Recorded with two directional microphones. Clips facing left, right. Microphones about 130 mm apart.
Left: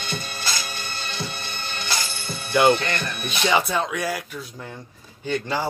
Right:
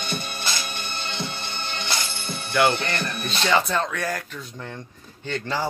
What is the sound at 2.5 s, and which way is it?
Speech, 25° left (ahead or behind).